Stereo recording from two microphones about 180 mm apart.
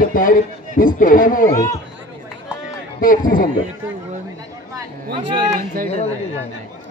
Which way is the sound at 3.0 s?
50° left (ahead or behind).